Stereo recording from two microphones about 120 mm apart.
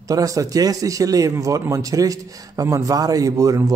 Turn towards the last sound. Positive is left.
turn(degrees=-30)  # may be behind; listen again after turning